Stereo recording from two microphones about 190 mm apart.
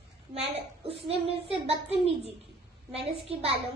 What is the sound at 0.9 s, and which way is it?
A child's voice, 30° right (ahead or behind).